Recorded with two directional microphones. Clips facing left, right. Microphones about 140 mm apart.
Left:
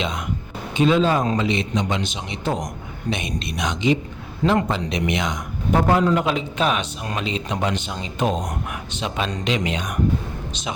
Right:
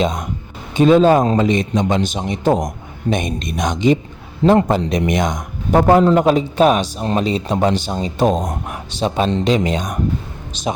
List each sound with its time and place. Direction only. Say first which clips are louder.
0.0 s a man's voice: right 6 dB; 40° right (ahead or behind)